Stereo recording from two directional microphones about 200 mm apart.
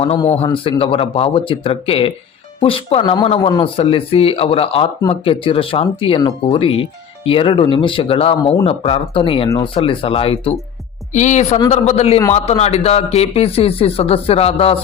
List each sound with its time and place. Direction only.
0.0 s a woman's voice: 30° left (ahead or behind)